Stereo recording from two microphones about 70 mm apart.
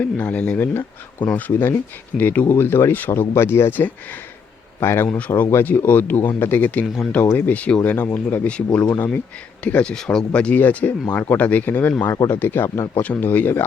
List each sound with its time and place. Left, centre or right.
0.0 s speech: left
6.8 s speech: centre
7.3 s speech: left
8.4 s speech: centre; by 12.8 s left
13.0 s speech: left